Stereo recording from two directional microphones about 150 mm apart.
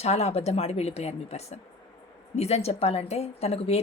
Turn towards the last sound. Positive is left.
turn(degrees=45)  # may be behind; listen again after turning